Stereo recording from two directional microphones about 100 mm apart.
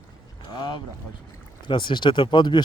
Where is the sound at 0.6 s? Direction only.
50° left (ahead or behind).